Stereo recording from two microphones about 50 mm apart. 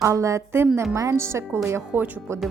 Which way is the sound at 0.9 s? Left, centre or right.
Right.